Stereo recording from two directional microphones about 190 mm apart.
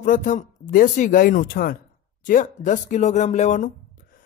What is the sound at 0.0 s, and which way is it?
Speech, 45° left (ahead or behind).